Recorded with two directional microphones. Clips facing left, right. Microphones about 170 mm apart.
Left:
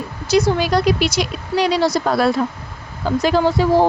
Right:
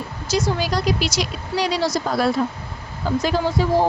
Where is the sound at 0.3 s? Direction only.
60° left (ahead or behind).